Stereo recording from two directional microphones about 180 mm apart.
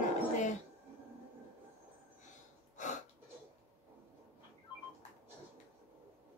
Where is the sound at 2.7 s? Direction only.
40° left (ahead or behind).